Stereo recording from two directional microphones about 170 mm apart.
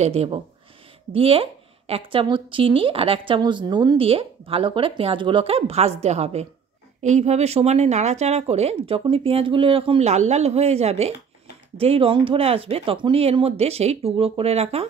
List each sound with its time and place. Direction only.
0.0 s a woman's voice: 35° right (ahead or behind)